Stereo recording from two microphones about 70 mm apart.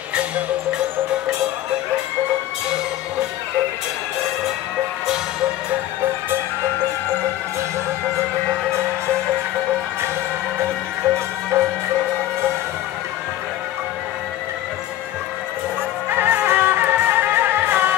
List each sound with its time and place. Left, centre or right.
11.5 s music: right
16.1 s music: right